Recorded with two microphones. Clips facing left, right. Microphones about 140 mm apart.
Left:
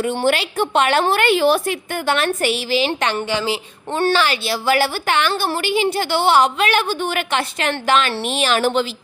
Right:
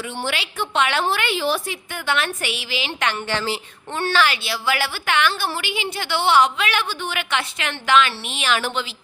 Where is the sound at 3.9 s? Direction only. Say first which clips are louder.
Left 3 dB; 30° left (ahead or behind).